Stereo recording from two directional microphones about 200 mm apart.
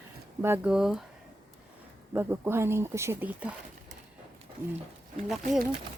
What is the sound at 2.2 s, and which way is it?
Speech, 10° right (ahead or behind).